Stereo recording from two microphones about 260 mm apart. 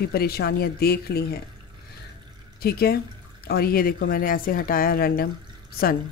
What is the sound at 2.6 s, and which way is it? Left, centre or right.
Speech, left.